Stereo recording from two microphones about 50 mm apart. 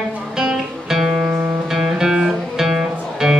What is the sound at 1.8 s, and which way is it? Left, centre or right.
Music, centre.